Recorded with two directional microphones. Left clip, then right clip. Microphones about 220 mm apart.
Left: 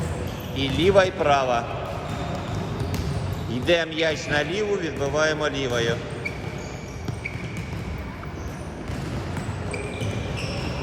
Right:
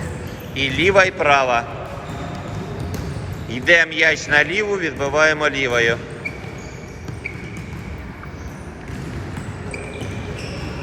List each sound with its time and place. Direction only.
0.5 s a man's voice: 20° left (ahead or behind)
3.5 s a man's voice: 20° left (ahead or behind)